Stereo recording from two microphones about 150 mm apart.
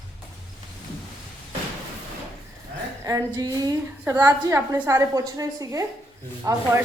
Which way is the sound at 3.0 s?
25° right (ahead or behind).